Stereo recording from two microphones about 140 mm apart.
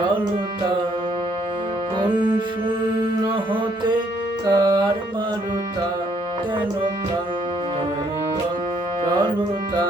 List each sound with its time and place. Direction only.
2.0 s music: 35° right (ahead or behind)
4.4 s music: 30° right (ahead or behind)
9.0 s music: 30° right (ahead or behind)